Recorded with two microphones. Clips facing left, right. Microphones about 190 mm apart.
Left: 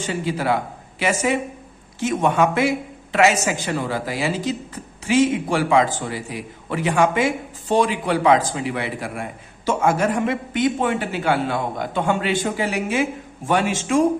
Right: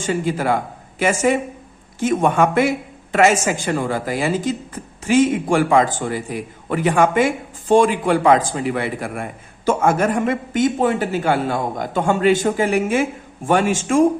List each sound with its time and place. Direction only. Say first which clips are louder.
0.0 s a woman's voice: right 3 dB; 45° right (ahead or behind)